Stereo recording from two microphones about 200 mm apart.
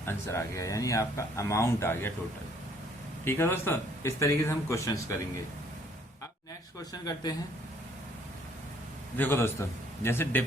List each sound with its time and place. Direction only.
0.0 s speech: 15° left (ahead or behind)
3.2 s speech: 10° left (ahead or behind)
6.7 s speech: 20° left (ahead or behind)
9.1 s speech: 10° left (ahead or behind)